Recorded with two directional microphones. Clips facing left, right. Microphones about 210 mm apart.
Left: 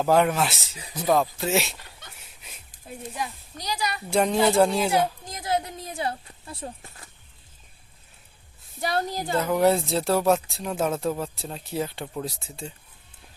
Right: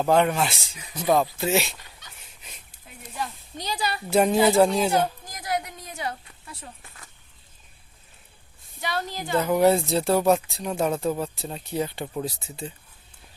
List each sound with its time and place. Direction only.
0.0 s speech: 5° left (ahead or behind)
3.6 s a woman's voice: 30° right (ahead or behind)
4.1 s speech: 5° right (ahead or behind)
5.2 s speech: 25° left (ahead or behind)
8.8 s a woman's voice: 35° left (ahead or behind)
9.3 s speech: centre (ahead or behind)